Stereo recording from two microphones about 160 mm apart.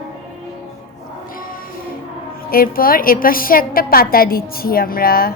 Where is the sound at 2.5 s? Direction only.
65° left (ahead or behind).